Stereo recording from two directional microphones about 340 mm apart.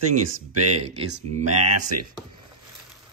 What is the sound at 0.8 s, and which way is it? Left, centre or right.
Speech, centre.